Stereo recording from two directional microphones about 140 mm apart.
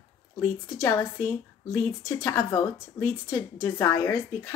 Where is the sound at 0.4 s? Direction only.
20° left (ahead or behind).